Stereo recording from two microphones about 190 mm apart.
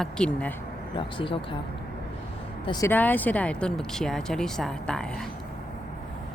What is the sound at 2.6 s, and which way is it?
Speech, 20° left (ahead or behind).